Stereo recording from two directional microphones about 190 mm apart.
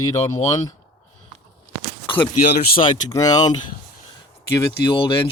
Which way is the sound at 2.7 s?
20° left (ahead or behind).